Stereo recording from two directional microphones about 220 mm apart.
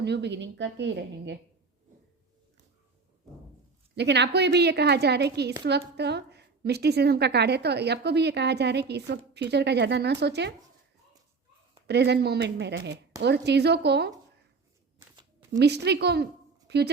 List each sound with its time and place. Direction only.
0.0 s a woman's voice: 50° right (ahead or behind)
3.9 s a woman's voice: 50° right (ahead or behind)
11.9 s a woman's voice: 50° right (ahead or behind)
15.5 s speech: 50° right (ahead or behind)